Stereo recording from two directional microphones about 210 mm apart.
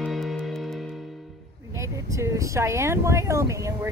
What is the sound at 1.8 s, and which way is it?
Speech, 15° right (ahead or behind).